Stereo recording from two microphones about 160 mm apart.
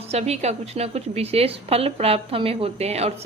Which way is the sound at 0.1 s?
40° right (ahead or behind).